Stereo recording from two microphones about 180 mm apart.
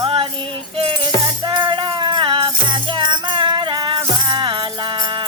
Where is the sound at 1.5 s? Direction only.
25° right (ahead or behind).